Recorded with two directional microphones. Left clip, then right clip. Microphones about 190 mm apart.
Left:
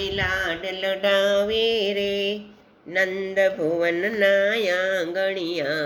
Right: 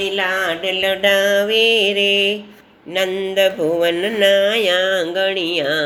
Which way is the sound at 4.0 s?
10° left (ahead or behind).